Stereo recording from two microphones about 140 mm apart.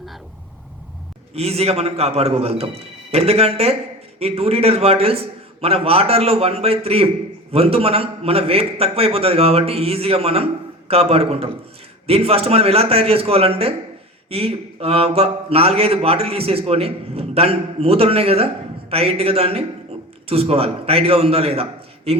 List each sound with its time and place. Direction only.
1.3 s a man's voice: 45° right (ahead or behind)